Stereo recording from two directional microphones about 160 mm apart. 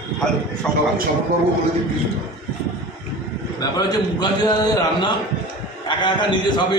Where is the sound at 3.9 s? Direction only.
25° left (ahead or behind).